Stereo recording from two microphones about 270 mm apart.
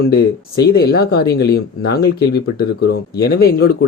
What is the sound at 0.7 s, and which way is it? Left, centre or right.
Speech, left.